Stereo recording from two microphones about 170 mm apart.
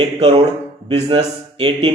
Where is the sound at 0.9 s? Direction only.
30° right (ahead or behind).